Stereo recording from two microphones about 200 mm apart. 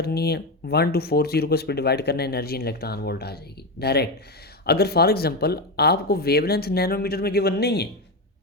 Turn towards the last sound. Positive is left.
turn(degrees=55)  # may be behind; listen again after turning